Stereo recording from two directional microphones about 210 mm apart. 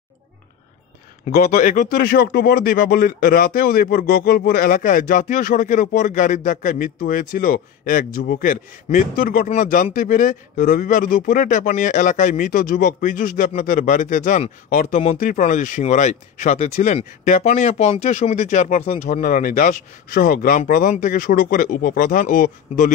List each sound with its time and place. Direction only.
1.3 s speech: 45° left (ahead or behind)